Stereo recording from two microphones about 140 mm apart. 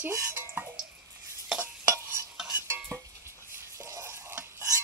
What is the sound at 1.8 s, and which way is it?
Stir, 20° right (ahead or behind).